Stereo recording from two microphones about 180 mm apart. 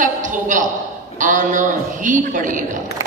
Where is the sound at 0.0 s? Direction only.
45° right (ahead or behind).